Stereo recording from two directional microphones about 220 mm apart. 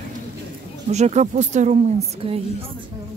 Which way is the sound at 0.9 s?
30° right (ahead or behind).